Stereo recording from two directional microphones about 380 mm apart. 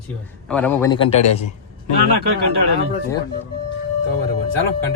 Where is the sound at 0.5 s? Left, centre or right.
Centre.